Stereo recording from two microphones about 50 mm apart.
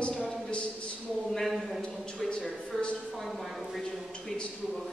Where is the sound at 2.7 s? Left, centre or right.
Centre.